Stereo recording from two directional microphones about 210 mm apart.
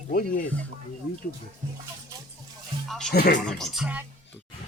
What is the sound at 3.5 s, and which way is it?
Speech, centre (ahead or behind).